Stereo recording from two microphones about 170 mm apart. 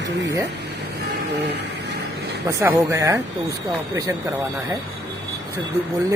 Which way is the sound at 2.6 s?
15° right (ahead or behind).